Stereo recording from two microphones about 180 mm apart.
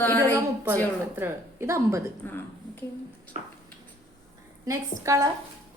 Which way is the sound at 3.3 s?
35° right (ahead or behind).